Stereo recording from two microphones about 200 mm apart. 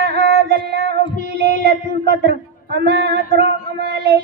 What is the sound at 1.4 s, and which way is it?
Speech, 55° right (ahead or behind).